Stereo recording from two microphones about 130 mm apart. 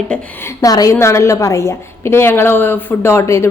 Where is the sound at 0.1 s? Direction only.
5° left (ahead or behind).